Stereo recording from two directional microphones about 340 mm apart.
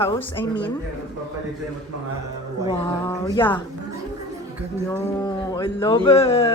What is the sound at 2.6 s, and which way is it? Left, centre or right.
Speech, centre.